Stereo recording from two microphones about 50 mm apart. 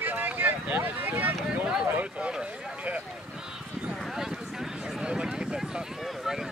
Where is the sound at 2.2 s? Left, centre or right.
Right.